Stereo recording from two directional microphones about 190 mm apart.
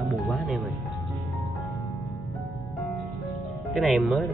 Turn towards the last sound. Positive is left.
turn(degrees=0)  # may be behind; listen again after turning